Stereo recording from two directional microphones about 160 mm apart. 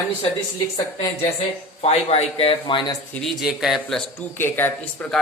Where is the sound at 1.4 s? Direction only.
40° left (ahead or behind).